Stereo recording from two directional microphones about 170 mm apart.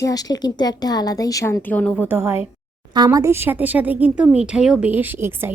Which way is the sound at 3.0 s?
20° right (ahead or behind).